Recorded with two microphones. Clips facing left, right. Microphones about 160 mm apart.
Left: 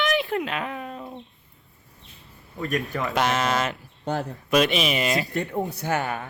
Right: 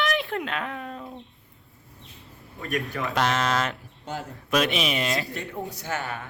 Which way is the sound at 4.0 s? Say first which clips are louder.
Left 7 dB; 65° left (ahead or behind).